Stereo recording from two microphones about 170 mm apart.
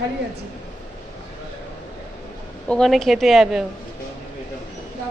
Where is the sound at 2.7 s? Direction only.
5° left (ahead or behind).